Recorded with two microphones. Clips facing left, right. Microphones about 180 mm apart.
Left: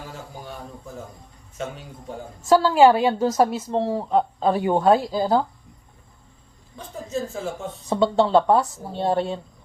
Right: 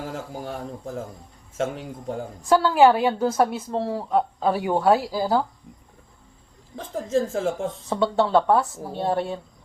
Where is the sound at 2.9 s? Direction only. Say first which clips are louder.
Left 2 dB; 10° right (ahead or behind).